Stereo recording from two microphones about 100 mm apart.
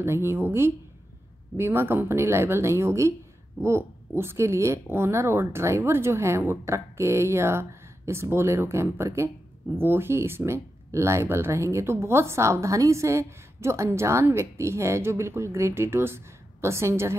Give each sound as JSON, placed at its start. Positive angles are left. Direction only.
{"t": 0.0, "sound": "speech", "side_deg": -25}